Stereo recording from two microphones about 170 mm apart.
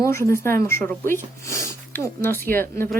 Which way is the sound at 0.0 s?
15° left (ahead or behind).